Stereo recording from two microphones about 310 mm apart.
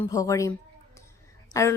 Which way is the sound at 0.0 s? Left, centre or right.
Centre.